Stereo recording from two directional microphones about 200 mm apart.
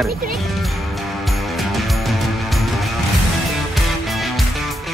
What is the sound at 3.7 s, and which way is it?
Music, centre (ahead or behind).